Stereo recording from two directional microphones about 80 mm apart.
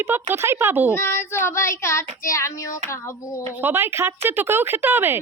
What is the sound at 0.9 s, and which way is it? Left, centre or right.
Child singing, left.